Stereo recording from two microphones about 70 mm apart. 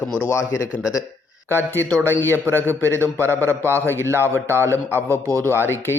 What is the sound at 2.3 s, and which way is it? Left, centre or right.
Speech, right.